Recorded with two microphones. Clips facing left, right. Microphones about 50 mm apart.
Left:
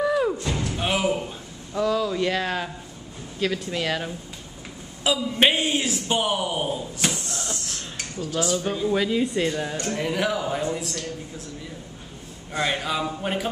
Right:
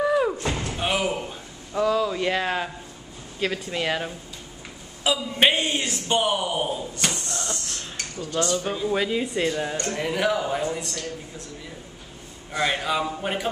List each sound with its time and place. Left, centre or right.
0.0 s slam: centre
0.4 s slam: right
0.7 s a sound: centre
3.3 s a man's voice: centre
12.5 s speech: centre